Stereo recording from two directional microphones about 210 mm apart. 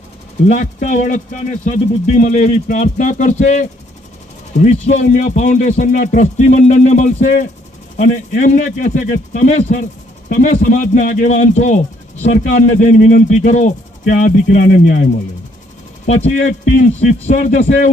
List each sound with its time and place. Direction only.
0.4 s speech: 35° left (ahead or behind)
16.0 s speech: 35° left (ahead or behind)